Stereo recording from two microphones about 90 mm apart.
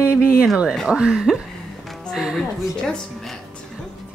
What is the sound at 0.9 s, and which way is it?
Music, 10° right (ahead or behind).